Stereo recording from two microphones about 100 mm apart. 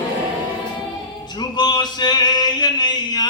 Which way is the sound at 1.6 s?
45° left (ahead or behind).